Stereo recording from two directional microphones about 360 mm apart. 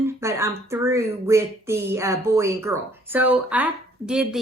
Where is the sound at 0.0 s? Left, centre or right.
Centre.